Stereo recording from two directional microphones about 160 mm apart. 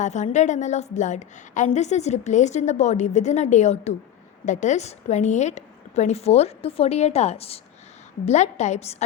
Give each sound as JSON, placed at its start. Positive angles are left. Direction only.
{"t": 0.0, "sound": "a woman's voice", "side_deg": 45}